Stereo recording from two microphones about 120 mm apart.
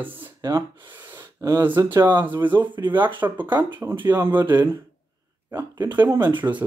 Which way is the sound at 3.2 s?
15° right (ahead or behind).